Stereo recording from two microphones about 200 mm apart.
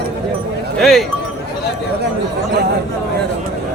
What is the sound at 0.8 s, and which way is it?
Speech, centre (ahead or behind).